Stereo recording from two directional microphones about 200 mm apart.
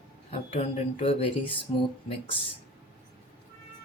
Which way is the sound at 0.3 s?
30° left (ahead or behind).